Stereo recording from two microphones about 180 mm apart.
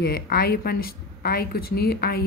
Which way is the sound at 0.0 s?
60° left (ahead or behind).